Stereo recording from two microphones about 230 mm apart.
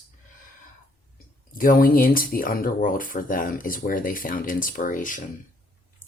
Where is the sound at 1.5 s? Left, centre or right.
Left.